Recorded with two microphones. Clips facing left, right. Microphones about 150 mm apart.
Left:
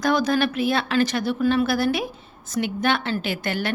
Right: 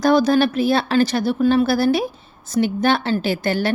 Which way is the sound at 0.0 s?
35° right (ahead or behind).